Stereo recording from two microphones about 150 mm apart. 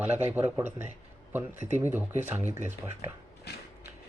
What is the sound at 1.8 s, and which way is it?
Speech, 15° right (ahead or behind).